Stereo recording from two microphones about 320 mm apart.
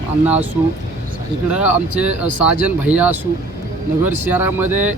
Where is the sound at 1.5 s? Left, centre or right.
Centre.